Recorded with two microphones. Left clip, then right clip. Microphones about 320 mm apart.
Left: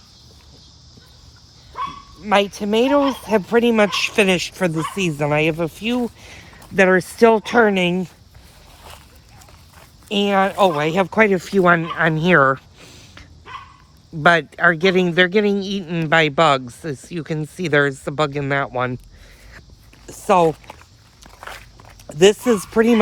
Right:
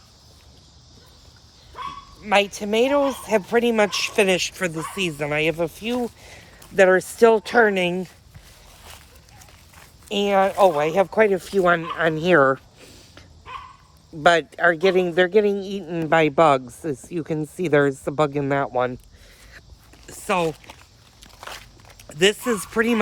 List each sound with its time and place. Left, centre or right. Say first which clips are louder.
2.3 s speech: left 2 dB; centre
10.1 s speech: left 1 dB; left
20.1 s speech: left 7 dB; centre
21.2 s walk: left 2 dB; centre